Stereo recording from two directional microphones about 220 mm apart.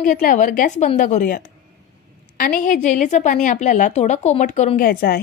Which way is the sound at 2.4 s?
35° left (ahead or behind).